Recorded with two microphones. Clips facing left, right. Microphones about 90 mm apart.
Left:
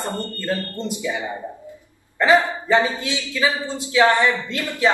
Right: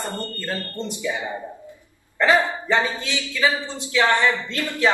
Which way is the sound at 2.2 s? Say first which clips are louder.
Left 2 dB; 15° left (ahead or behind).